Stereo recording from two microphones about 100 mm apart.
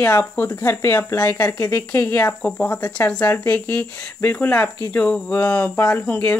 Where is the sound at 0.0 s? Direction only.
25° left (ahead or behind).